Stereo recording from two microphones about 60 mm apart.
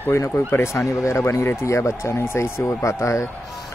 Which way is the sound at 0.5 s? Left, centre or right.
Left.